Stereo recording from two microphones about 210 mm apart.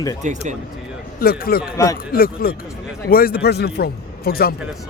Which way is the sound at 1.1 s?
45° left (ahead or behind).